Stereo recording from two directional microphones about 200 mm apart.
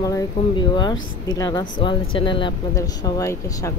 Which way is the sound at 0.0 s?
20° left (ahead or behind).